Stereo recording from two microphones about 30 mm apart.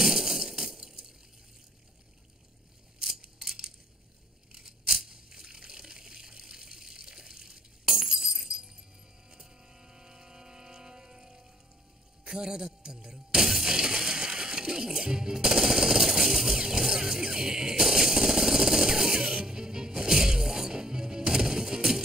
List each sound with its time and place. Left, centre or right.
0.0 s crushing: centre
3.3 s a sound: right
4.6 s tearing: centre
5.0 s water: right
8.5 s music: centre
9.3 s vehicle: right
12.3 s a sound: centre
16.5 s music: centre